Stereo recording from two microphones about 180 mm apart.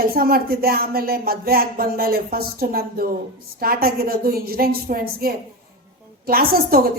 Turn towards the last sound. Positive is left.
turn(degrees=-55)  # may be behind; listen again after turning